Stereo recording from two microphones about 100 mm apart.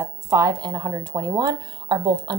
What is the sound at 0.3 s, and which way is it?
Speech, 40° right (ahead or behind).